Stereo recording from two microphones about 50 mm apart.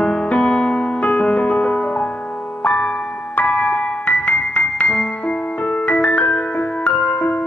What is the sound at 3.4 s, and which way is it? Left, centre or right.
Music, centre.